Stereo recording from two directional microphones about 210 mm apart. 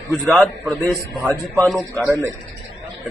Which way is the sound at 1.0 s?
10° right (ahead or behind).